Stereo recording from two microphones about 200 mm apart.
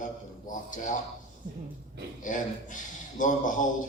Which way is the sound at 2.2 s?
40° left (ahead or behind).